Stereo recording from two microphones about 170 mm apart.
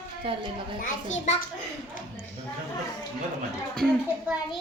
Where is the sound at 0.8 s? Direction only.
45° left (ahead or behind).